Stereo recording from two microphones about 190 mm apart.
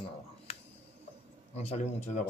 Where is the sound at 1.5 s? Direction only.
35° left (ahead or behind).